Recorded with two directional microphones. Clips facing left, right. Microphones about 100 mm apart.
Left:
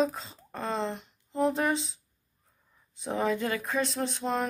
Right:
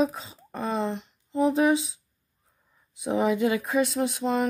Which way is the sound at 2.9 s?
10° right (ahead or behind).